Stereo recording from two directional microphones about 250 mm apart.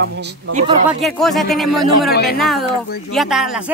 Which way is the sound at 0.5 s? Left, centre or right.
Right.